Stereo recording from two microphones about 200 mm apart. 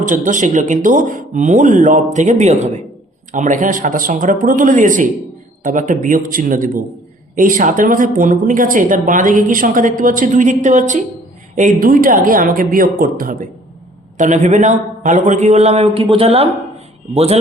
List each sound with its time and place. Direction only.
0.0 s a woman's voice: 40° right (ahead or behind)